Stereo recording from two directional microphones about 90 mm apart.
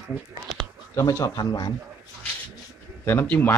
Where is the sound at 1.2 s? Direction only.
45° left (ahead or behind).